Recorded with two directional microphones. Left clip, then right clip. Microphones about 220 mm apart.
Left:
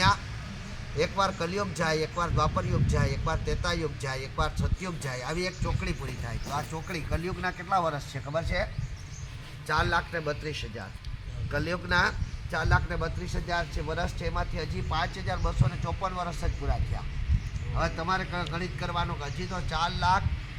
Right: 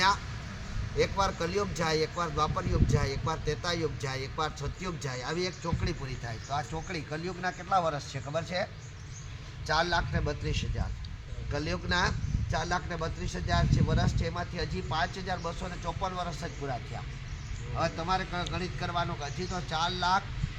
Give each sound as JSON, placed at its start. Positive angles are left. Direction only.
{"t": 0.9, "sound": "speech", "side_deg": -5}
{"t": 9.6, "sound": "a man's voice", "side_deg": -25}
{"t": 17.7, "sound": "speech", "side_deg": -10}